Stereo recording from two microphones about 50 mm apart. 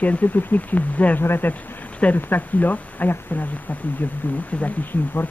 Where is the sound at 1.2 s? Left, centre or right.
Left.